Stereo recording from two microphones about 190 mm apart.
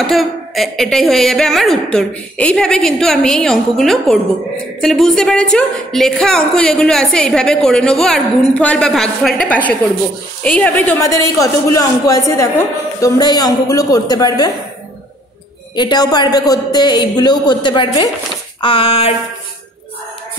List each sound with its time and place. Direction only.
0.0 s a woman's voice: centre (ahead or behind); by 14.5 s 20° left (ahead or behind)
15.7 s a woman's voice: 20° left (ahead or behind)